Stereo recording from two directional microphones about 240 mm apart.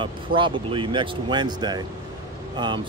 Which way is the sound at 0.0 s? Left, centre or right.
Right.